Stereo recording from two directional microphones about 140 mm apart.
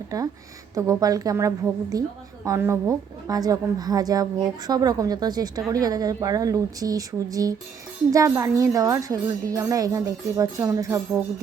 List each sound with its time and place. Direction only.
0.1 s a woman's voice: 25° right (ahead or behind)